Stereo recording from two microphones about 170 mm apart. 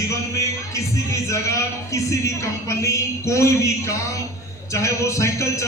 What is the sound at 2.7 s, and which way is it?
Speech, 20° left (ahead or behind).